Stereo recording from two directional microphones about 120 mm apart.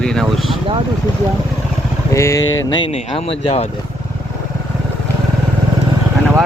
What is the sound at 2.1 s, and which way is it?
Speech, 25° left (ahead or behind).